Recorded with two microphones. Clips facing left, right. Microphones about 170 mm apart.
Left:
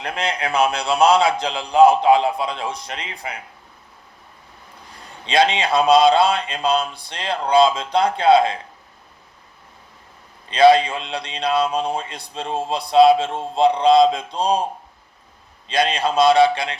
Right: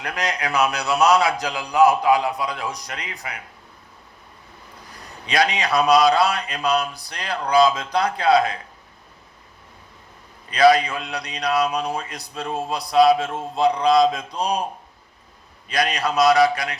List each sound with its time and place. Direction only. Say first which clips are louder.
0.0 s a man's voice: left 2 dB; 25° left (ahead or behind)
5.2 s a man's voice: left 3 dB; 25° left (ahead or behind)
10.5 s a man's voice: left 3 dB; 25° left (ahead or behind)
15.6 s a man's voice: left 3 dB; 25° left (ahead or behind)